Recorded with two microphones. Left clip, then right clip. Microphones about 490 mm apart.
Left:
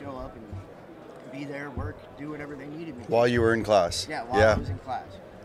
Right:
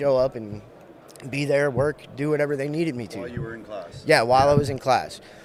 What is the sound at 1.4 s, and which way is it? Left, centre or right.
Speech, right.